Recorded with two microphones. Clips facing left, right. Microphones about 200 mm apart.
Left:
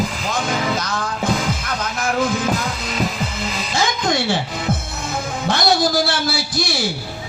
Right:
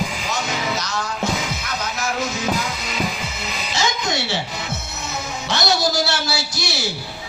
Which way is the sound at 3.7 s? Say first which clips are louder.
Left 3 dB; 50° left (ahead or behind).